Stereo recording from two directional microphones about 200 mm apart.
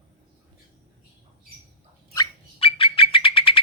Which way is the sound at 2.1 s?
25° left (ahead or behind).